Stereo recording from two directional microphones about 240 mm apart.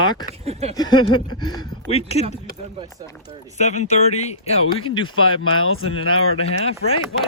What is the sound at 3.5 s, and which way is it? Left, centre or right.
Speech, left.